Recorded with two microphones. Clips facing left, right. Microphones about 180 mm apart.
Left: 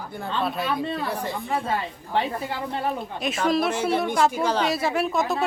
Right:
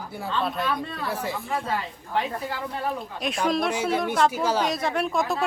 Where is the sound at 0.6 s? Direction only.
25° left (ahead or behind).